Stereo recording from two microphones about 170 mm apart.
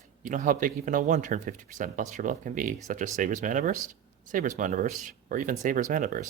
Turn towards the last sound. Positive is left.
turn(degrees=-50)  # may be behind; listen again after turning